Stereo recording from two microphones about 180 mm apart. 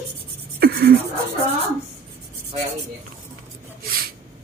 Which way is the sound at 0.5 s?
60° right (ahead or behind).